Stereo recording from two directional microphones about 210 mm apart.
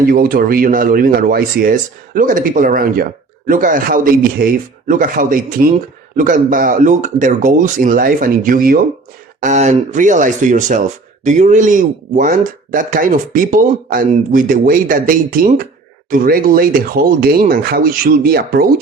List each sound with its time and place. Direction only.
0.0 s speech: 45° right (ahead or behind)